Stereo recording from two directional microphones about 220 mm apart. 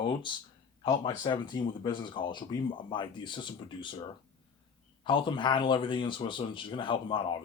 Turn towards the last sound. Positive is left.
turn(degrees=20)  # may be behind; listen again after turning